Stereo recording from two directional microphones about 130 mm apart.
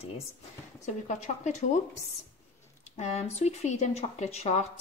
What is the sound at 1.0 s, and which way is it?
Speech, 70° left (ahead or behind).